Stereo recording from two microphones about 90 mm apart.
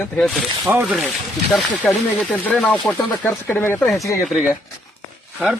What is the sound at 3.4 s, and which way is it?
Speech, 25° left (ahead or behind).